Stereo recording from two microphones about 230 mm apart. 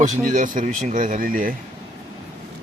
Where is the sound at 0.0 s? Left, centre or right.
Right.